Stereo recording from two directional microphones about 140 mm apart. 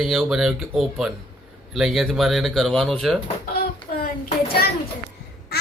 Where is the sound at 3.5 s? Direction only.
90° left.